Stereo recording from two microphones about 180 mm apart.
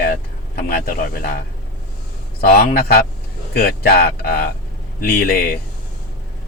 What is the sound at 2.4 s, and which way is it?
Speech, 55° left (ahead or behind).